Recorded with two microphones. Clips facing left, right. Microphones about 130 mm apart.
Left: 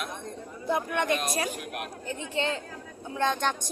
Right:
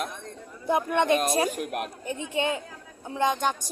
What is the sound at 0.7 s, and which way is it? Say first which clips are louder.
Speech: right 4 dB; 20° right (ahead or behind).